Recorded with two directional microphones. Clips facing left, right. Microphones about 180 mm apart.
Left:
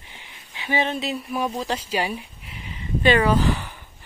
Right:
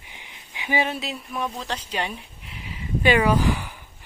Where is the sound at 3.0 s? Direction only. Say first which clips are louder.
Left 1 dB; 10° right (ahead or behind).